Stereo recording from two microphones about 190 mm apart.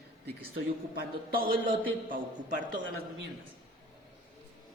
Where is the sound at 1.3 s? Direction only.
50° right (ahead or behind).